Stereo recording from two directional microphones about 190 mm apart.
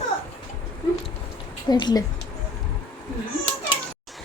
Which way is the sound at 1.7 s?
20° left (ahead or behind).